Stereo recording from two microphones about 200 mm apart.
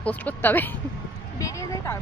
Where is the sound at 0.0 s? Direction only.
10° left (ahead or behind).